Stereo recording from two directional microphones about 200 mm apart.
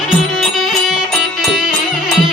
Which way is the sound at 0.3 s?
Centre (ahead or behind).